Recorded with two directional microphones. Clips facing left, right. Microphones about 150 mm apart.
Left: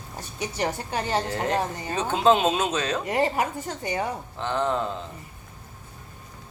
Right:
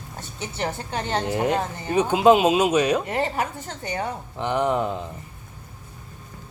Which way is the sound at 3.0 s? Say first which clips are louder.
Left 1 dB; 15° left (ahead or behind).